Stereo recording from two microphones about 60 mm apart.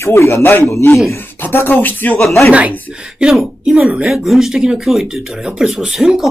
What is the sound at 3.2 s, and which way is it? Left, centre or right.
Speech, centre.